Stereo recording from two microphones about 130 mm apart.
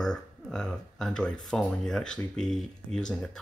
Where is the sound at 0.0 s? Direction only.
5° left (ahead or behind).